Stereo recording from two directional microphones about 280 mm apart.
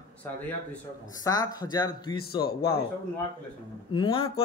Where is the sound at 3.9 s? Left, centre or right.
Centre.